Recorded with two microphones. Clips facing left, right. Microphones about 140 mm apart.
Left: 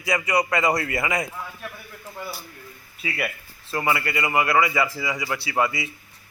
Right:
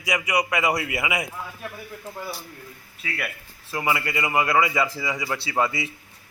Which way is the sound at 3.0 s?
5° left (ahead or behind).